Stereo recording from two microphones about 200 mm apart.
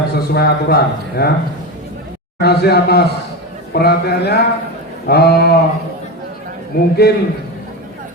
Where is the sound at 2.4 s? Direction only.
55° left (ahead or behind).